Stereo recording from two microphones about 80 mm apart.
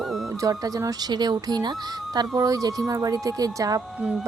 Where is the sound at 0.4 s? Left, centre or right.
Right.